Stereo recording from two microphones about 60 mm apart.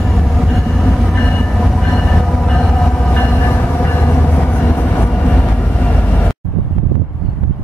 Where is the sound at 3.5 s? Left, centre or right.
Left.